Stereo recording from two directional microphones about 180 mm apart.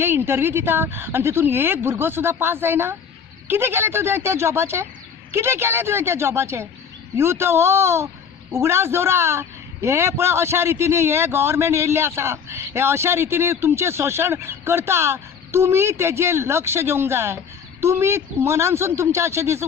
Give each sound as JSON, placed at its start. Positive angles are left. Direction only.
{"t": 0.0, "sound": "speech", "side_deg": -10}